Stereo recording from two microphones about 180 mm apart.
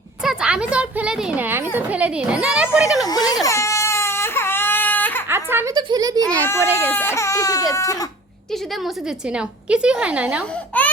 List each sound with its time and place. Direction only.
0.2 s a woman's voice: 5° right (ahead or behind)
3.1 s speech: 20° left (ahead or behind)
3.4 s baby cry: 15° left (ahead or behind)
5.3 s a woman's voice: 15° right (ahead or behind)
6.2 s a child's voice: 15° left (ahead or behind)
8.8 s a woman's voice: 5° right (ahead or behind)
10.7 s baby cry: 10° left (ahead or behind)